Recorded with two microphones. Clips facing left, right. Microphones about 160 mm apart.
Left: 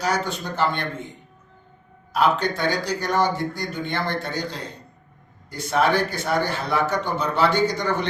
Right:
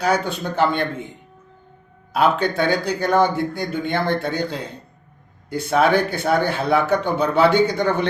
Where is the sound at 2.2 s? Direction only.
55° right (ahead or behind).